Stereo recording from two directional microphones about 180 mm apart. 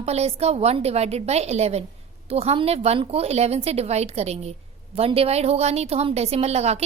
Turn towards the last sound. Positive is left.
turn(degrees=-35)  # may be behind; listen again after turning